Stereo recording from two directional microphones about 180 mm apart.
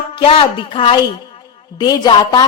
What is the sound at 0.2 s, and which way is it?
A woman's voice, 30° left (ahead or behind).